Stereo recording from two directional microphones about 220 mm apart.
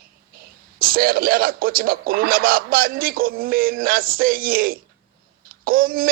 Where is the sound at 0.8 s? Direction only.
40° right (ahead or behind).